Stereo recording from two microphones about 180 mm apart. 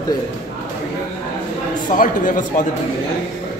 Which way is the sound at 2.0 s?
45° left (ahead or behind).